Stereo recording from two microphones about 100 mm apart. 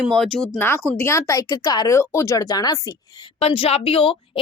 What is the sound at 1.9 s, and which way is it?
A woman's voice, 30° left (ahead or behind).